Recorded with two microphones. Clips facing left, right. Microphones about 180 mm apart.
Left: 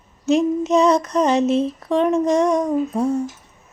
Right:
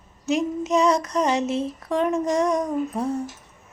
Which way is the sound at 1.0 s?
15° right (ahead or behind).